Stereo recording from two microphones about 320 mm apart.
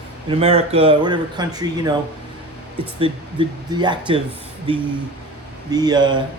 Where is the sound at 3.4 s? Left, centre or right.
Centre.